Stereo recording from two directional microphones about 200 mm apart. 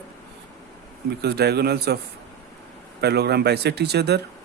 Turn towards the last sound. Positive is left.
turn(degrees=-55)  # may be behind; listen again after turning